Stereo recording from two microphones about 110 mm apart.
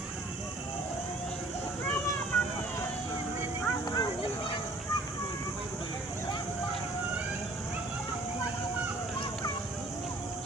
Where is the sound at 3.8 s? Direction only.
40° left (ahead or behind).